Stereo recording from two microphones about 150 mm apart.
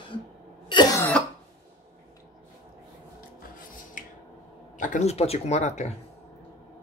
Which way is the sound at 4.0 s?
60° left (ahead or behind).